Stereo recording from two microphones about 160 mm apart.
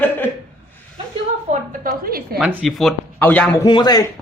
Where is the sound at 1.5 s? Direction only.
60° right (ahead or behind).